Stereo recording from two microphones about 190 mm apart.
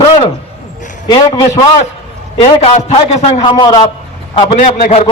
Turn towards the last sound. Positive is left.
turn(degrees=35)  # may be behind; listen again after turning